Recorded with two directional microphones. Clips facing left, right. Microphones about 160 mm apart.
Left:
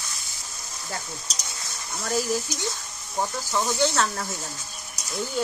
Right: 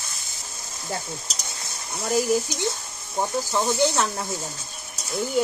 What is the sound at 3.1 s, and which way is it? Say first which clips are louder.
Speech: right 2 dB; 15° right (ahead or behind).